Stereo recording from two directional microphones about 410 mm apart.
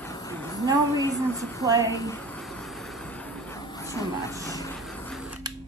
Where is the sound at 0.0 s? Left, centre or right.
Centre.